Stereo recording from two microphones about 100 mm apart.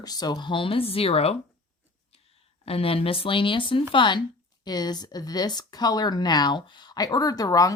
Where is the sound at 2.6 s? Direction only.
75° left (ahead or behind).